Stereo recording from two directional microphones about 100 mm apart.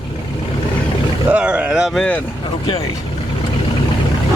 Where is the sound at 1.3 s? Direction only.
15° right (ahead or behind).